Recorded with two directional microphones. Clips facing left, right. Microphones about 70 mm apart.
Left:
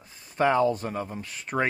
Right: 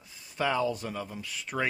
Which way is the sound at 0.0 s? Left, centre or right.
Left.